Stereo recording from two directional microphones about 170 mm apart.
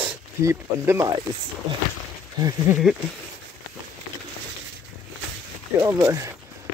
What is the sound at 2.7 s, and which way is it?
Speech, 15° right (ahead or behind).